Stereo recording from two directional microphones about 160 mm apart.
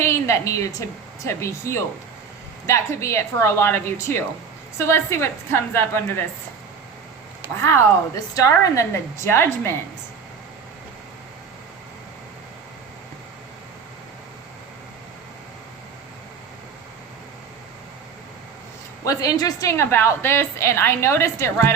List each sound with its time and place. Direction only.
0.0 s a woman's voice: 15° left (ahead or behind)
7.6 s a woman's voice: 15° left (ahead or behind)
19.0 s a woman's voice: 25° left (ahead or behind)